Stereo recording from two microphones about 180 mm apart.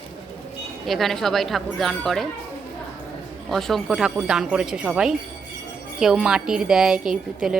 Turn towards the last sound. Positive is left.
turn(degrees=-5)  # may be behind; listen again after turning